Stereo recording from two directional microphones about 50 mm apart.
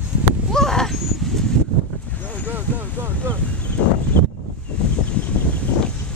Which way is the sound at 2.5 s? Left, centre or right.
Right.